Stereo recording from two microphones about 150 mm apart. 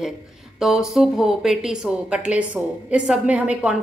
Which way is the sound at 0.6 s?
Centre (ahead or behind).